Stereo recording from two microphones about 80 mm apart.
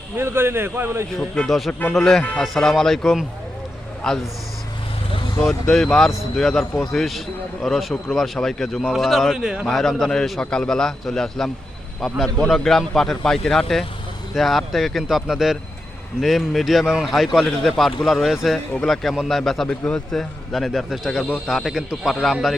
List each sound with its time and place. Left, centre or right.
0.2 s a man's voice: right
1.5 s a man's voice: centre
5.4 s a man's voice: centre
9.6 s a man's voice: centre
19.6 s a man's voice: centre
20.1 s a man's voice: centre